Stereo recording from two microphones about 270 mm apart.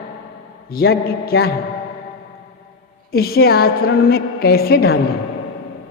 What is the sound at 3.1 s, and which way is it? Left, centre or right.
A man's voice, left.